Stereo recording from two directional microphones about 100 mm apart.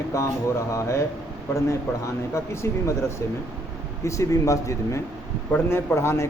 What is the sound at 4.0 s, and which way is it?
Speech, 30° left (ahead or behind).